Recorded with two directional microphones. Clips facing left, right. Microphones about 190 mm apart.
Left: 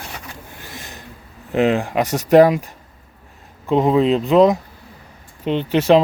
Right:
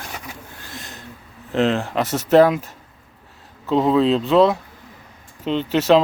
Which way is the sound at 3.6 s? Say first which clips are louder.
Left 1 dB; 10° left (ahead or behind).